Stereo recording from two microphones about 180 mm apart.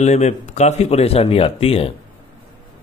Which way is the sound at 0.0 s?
40° left (ahead or behind).